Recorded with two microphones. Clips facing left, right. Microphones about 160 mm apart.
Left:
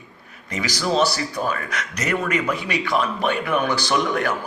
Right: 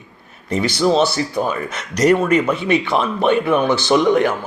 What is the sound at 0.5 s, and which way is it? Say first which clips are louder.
A man's voice: right 6 dB; 30° right (ahead or behind).